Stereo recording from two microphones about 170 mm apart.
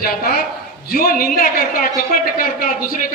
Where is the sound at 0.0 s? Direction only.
60° left (ahead or behind).